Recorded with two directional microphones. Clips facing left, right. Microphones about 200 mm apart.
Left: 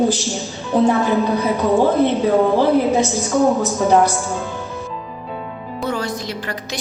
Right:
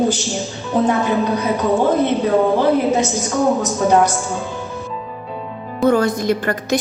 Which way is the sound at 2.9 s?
Centre (ahead or behind).